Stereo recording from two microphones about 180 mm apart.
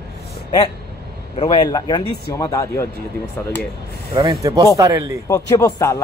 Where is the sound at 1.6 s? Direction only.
20° left (ahead or behind).